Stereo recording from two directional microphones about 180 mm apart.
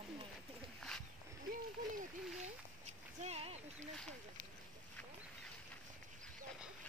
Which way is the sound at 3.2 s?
35° right (ahead or behind).